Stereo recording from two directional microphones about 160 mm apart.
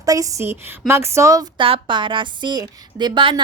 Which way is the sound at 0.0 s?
20° right (ahead or behind).